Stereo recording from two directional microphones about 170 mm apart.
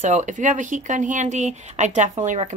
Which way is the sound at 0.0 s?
45° right (ahead or behind).